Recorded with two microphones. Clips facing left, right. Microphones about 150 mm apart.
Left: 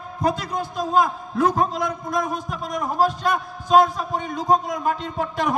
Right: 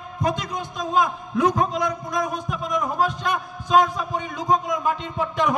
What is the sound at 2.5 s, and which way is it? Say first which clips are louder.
A man's voice: right 1 dB; 40° left (ahead or behind).